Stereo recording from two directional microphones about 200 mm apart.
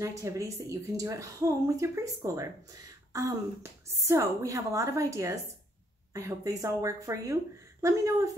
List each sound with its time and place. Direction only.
0.0 s speech: 15° right (ahead or behind)